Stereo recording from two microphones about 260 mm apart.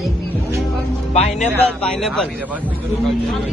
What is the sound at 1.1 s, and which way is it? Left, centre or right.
Speech, left.